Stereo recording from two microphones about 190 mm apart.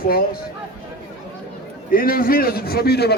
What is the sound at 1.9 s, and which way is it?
A man's voice, 50° left (ahead or behind).